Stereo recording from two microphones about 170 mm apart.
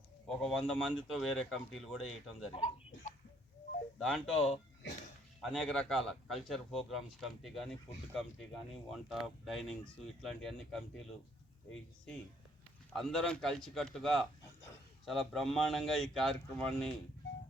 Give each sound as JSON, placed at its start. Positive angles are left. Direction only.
{"t": 0.3, "sound": "speech", "side_deg": 5}
{"t": 2.6, "sound": "speech", "side_deg": 40}
{"t": 3.9, "sound": "speech", "side_deg": 0}
{"t": 12.9, "sound": "speech", "side_deg": 0}